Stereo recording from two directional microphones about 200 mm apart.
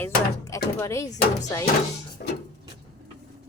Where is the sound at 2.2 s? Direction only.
45° left (ahead or behind).